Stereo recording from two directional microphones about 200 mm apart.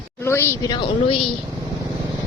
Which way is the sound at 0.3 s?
10° left (ahead or behind).